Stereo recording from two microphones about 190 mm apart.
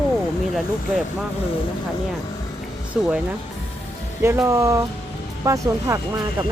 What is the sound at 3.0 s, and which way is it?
Speech, 5° right (ahead or behind).